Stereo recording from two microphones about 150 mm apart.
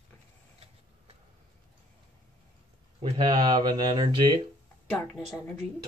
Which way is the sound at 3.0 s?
30° right (ahead or behind).